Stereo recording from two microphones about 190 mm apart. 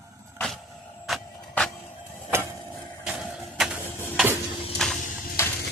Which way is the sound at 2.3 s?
15° right (ahead or behind).